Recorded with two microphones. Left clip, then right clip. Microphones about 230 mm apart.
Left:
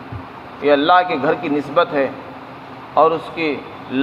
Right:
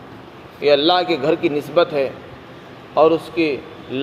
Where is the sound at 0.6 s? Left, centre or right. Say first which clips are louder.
Left 2 dB; right.